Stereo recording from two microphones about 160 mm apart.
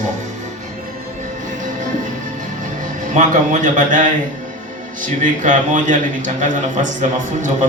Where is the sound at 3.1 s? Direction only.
55° right (ahead or behind).